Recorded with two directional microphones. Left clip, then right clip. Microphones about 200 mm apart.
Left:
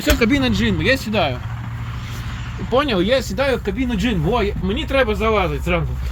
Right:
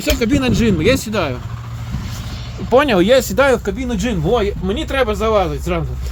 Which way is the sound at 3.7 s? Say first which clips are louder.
Even; 10° right (ahead or behind).